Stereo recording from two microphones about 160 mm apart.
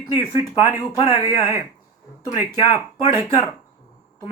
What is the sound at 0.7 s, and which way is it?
Speech, 20° left (ahead or behind).